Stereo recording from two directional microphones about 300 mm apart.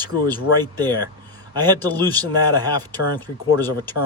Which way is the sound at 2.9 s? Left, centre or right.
Centre.